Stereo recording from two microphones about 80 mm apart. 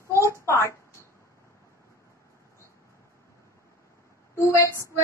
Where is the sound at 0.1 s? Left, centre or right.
Left.